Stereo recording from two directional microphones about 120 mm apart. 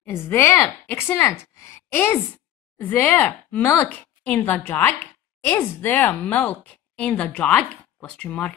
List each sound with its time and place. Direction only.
0.0 s speech: 20° left (ahead or behind)
2.8 s a woman's voice: 15° left (ahead or behind)